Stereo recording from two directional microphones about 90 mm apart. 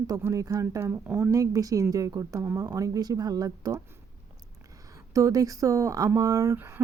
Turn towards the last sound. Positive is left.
turn(degrees=-25)  # may be behind; listen again after turning